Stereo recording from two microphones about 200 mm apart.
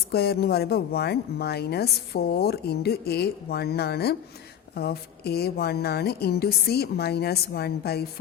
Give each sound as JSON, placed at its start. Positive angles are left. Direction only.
{"t": 0.1, "sound": "speech", "side_deg": 50}